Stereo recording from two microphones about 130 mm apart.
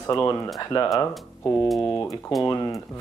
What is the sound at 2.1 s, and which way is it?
Speech, centre (ahead or behind).